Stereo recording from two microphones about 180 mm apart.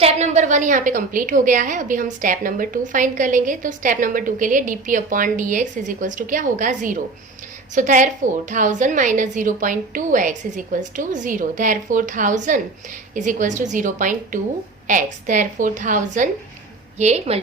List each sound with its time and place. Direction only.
0.0 s a woman's voice: 40° right (ahead or behind)